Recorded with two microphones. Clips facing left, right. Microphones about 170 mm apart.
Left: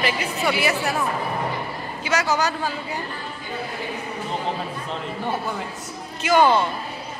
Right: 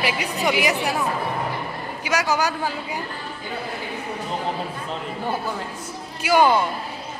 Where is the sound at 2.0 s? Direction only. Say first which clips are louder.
Even; 10° right (ahead or behind).